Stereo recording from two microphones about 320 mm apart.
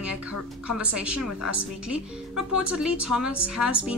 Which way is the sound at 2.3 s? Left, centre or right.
Centre.